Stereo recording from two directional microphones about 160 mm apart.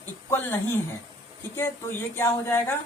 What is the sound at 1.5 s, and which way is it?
Speech, 15° left (ahead or behind).